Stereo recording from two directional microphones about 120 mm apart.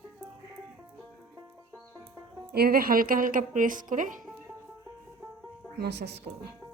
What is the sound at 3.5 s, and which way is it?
Speech, 90° right.